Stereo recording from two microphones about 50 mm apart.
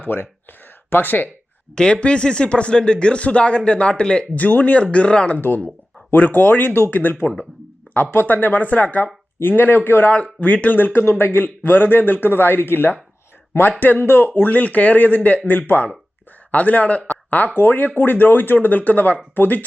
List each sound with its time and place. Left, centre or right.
0.0 s speech: left
1.7 s speech: centre
4.4 s speech: left
6.1 s speech: left
8.3 s speech: left
9.4 s a man's voice: left
10.4 s speech: left
10.8 s a man's voice: left
13.7 s speech: left
17.1 s a sound: left
17.6 s speech: left